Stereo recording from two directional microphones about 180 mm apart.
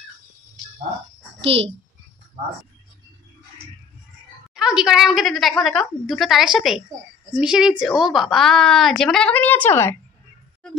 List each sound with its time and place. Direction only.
1.4 s a child's voice: 35° right (ahead or behind)
4.6 s a woman's voice: 5° right (ahead or behind); by 9.9 s 10° left (ahead or behind)